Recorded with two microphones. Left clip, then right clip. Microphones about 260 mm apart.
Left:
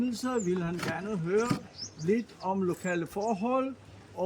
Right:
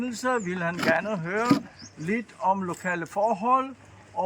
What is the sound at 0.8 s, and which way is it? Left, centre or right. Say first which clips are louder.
Speech: right 11 dB; right.